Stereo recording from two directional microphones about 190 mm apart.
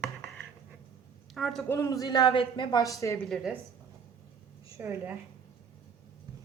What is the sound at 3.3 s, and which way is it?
Speech, centre (ahead or behind).